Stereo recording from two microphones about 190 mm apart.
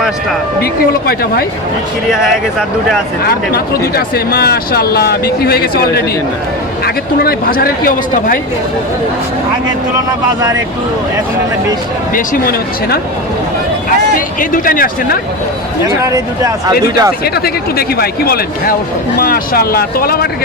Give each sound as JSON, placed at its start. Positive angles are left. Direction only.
{"t": 0.6, "sound": "speech", "side_deg": 55}
{"t": 2.0, "sound": "speech", "side_deg": 0}
{"t": 3.2, "sound": "speech", "side_deg": 55}
{"t": 12.1, "sound": "speech", "side_deg": 50}
{"t": 14.5, "sound": "speech", "side_deg": 50}
{"t": 15.9, "sound": "speech", "side_deg": -15}
{"t": 17.2, "sound": "speech", "side_deg": 55}